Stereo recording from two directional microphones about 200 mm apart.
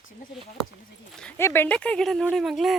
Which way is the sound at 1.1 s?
5° left (ahead or behind).